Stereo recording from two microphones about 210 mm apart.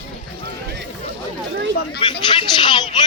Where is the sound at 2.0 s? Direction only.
25° left (ahead or behind).